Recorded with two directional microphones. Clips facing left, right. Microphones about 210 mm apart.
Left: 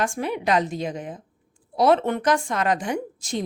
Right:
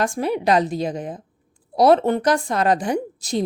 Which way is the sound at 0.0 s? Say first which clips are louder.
Right 4 dB; 35° right (ahead or behind).